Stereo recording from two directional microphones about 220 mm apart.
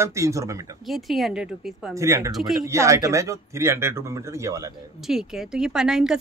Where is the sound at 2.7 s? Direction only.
15° right (ahead or behind).